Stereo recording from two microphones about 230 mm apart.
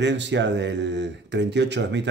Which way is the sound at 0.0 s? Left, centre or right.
Right.